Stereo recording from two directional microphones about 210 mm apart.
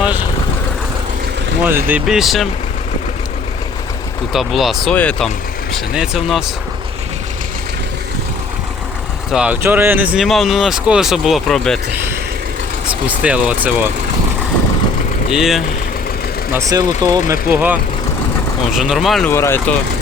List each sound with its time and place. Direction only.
1.6 s speech: 10° right (ahead or behind)
4.3 s speech: centre (ahead or behind)
9.3 s speech: 5° right (ahead or behind)
12.9 s speech: 5° right (ahead or behind)
15.3 s speech: centre (ahead or behind)
16.5 s speech: 15° right (ahead or behind)
19.3 s speech: 10° left (ahead or behind)